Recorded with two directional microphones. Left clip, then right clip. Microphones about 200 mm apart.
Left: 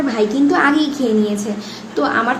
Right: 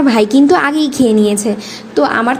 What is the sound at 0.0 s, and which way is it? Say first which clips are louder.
A woman's voice: right 6 dB; 40° right (ahead or behind).